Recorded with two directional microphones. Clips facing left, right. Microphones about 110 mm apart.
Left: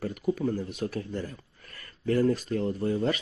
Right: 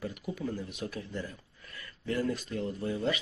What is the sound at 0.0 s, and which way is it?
Speech, 45° left (ahead or behind).